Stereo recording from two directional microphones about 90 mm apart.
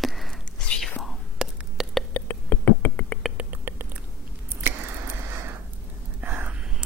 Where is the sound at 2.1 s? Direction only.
20° left (ahead or behind).